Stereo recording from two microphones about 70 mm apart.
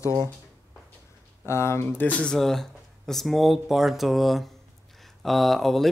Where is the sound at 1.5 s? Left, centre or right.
Left.